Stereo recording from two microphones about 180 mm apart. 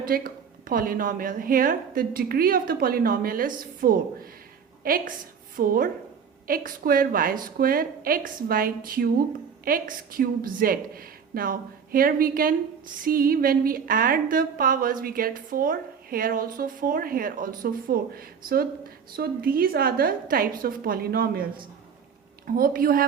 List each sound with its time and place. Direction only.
0.0 s a woman's voice: 50° right (ahead or behind)
22.5 s a woman's voice: 55° right (ahead or behind)